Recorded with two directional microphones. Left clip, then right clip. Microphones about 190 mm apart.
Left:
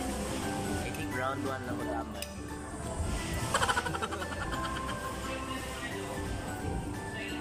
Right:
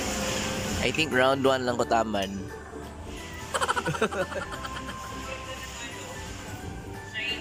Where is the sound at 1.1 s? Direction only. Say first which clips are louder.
Right 12 dB; 45° right (ahead or behind).